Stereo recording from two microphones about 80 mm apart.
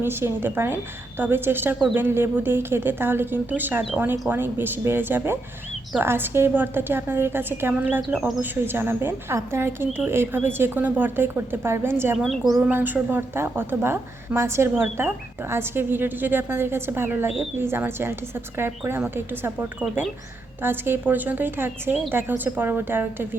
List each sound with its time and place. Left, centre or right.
0.0 s a woman's voice: right
12.1 s speech: centre
12.7 s a woman's voice: right